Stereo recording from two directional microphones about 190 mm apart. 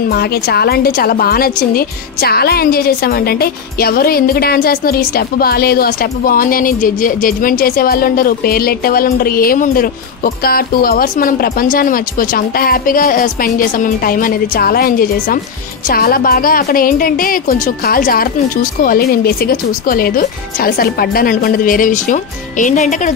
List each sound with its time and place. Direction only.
0.1 s a woman's voice: 55° left (ahead or behind)